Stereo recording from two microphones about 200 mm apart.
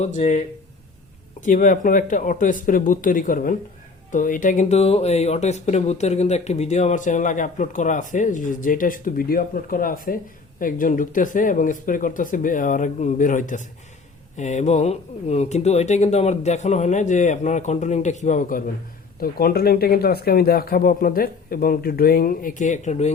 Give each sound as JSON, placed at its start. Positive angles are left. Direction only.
{"t": 0.0, "sound": "speech", "side_deg": 35}